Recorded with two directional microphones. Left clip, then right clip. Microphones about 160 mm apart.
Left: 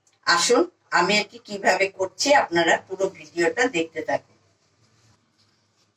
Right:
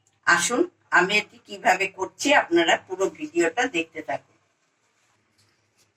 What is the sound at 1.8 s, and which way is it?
Speech, 20° left (ahead or behind).